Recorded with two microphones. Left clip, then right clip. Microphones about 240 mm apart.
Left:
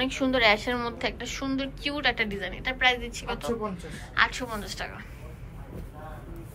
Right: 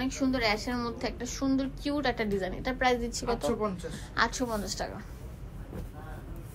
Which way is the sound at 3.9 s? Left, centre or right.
Centre.